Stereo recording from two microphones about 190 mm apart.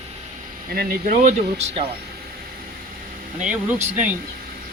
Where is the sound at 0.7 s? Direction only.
45° right (ahead or behind).